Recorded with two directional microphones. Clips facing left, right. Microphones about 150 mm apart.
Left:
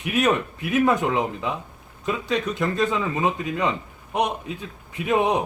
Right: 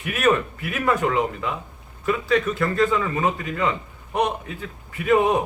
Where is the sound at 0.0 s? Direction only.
20° left (ahead or behind).